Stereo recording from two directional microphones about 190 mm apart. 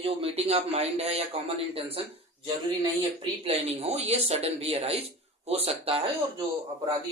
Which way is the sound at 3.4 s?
35° right (ahead or behind).